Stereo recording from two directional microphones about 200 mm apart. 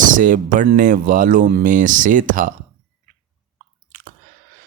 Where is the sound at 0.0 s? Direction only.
40° right (ahead or behind).